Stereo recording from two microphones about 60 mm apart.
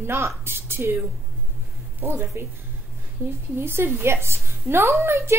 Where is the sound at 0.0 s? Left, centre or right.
Right.